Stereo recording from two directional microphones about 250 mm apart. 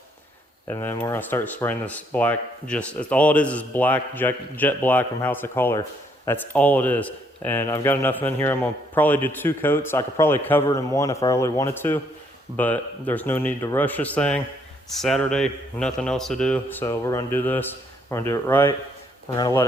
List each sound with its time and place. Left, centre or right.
0.7 s speech: centre